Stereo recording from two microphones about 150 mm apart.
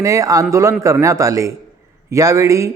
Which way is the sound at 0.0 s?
20° right (ahead or behind).